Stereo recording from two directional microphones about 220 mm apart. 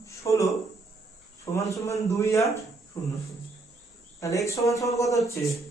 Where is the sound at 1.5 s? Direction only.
15° left (ahead or behind).